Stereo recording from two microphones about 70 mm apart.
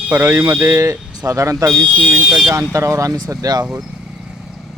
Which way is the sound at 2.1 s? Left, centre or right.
Centre.